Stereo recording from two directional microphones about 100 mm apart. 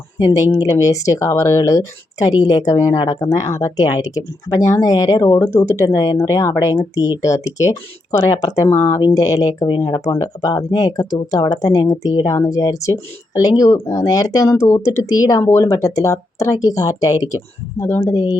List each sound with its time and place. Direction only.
0.2 s speech: 35° left (ahead or behind)
9.7 s speech: 50° left (ahead or behind)
10.2 s speech: 35° left (ahead or behind)